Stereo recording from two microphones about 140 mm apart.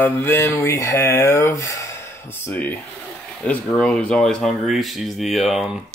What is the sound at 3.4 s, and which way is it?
Speech, 5° left (ahead or behind).